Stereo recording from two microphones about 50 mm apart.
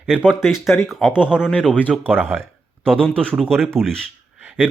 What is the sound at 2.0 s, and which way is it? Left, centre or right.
Speech, right.